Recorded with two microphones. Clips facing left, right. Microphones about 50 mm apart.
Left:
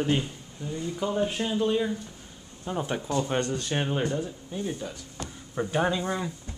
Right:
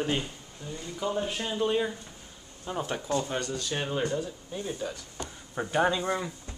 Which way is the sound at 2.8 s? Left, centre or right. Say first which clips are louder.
Left 1 dB; centre.